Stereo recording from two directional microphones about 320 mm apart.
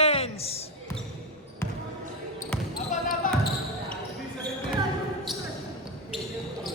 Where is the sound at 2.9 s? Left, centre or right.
Left.